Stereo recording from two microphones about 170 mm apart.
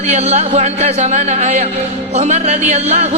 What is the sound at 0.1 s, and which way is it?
Speech, 40° right (ahead or behind).